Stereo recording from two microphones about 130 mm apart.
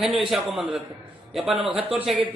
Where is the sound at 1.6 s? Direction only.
45° right (ahead or behind).